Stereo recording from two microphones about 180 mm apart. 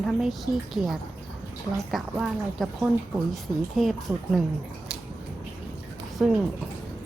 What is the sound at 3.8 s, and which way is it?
Speech, centre (ahead or behind).